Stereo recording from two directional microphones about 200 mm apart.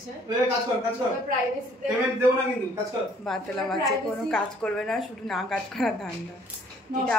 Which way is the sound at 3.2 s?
Centre (ahead or behind).